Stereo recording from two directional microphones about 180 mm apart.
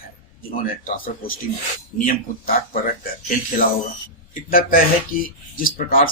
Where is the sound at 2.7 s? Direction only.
50° left (ahead or behind).